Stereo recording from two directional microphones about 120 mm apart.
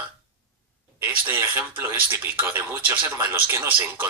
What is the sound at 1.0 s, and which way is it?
Speech, 15° right (ahead or behind).